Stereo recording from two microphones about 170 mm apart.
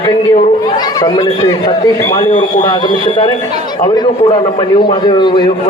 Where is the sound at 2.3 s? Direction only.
50° left (ahead or behind).